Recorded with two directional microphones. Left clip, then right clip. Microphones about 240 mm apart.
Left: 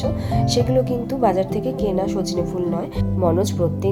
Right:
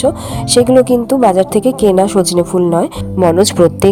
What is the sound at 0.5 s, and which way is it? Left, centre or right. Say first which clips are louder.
A woman's voice: right 12 dB; right.